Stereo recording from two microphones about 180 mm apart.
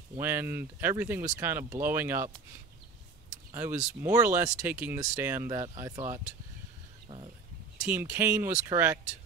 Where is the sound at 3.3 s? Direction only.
15° right (ahead or behind).